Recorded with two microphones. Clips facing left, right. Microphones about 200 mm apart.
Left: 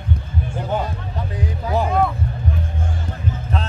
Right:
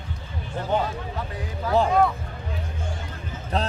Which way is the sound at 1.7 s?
10° left (ahead or behind).